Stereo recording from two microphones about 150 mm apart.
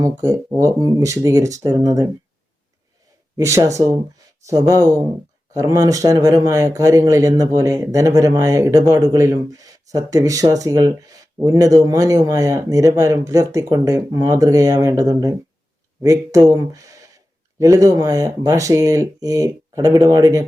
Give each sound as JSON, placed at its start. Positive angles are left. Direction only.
{"t": 0.0, "sound": "speech", "side_deg": -20}
{"t": 3.3, "sound": "speech", "side_deg": -20}